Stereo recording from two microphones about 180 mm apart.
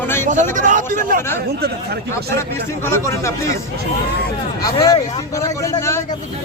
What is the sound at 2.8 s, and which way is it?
Speech, 15° left (ahead or behind).